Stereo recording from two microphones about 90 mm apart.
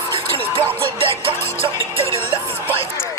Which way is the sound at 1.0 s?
90° right.